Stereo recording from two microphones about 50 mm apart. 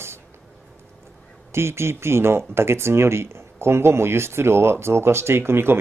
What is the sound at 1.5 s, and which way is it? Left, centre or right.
Speech, right.